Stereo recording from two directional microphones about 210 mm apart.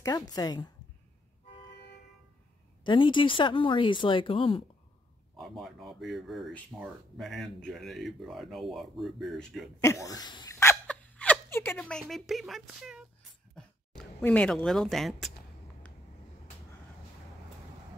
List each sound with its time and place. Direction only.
0.0 s speech: 20° left (ahead or behind)
2.8 s speech: 20° left (ahead or behind)
5.3 s speech: centre (ahead or behind)
9.8 s speech: 15° left (ahead or behind)